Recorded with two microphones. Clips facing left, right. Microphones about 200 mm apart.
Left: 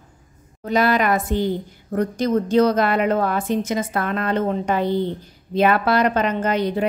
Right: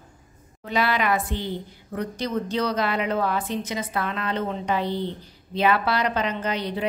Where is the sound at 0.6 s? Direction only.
45° left (ahead or behind).